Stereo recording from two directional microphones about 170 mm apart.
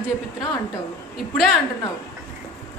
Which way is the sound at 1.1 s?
Centre (ahead or behind).